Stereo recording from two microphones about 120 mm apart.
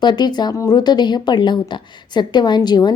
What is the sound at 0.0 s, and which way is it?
Speech, 35° left (ahead or behind).